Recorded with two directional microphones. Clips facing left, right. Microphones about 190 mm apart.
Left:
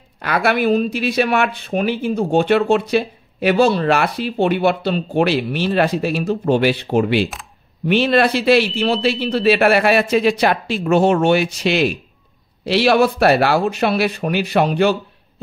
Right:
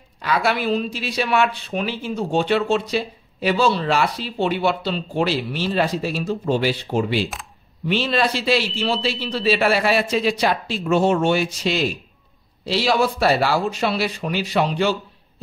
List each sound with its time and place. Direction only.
0.2 s speech: 60° left (ahead or behind)